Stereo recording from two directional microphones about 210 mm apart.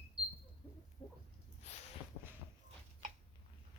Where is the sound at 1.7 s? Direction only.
30° left (ahead or behind).